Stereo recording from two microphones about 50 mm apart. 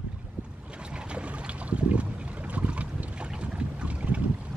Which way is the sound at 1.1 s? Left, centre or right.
Right.